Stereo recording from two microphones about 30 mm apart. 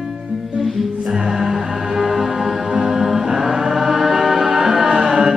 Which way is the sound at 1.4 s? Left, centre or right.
Centre.